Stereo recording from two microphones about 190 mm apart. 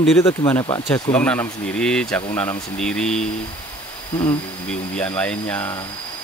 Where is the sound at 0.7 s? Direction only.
20° left (ahead or behind).